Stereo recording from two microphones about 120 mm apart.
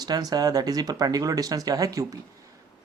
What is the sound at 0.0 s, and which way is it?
Speech, 30° right (ahead or behind).